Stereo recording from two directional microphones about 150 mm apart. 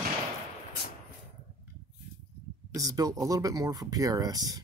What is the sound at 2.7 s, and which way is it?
Speech, 25° right (ahead or behind).